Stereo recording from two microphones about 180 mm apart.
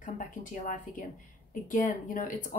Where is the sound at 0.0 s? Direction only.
45° left (ahead or behind).